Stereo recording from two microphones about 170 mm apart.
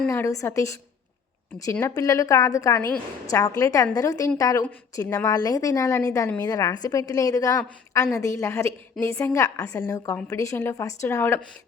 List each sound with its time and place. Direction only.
0.1 s a woman's voice: 20° left (ahead or behind)